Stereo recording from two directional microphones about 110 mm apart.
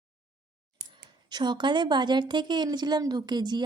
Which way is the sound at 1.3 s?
45° right (ahead or behind).